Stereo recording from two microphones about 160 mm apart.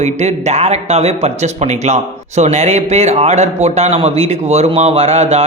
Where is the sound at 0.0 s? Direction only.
45° right (ahead or behind).